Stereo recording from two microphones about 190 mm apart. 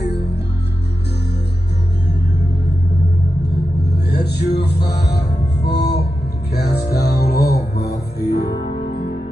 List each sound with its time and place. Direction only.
0.0 s music: 60° left (ahead or behind)
4.1 s vehicle: 60° left (ahead or behind)
4.8 s music: 60° left (ahead or behind)